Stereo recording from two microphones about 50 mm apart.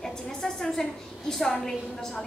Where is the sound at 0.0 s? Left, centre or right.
Centre.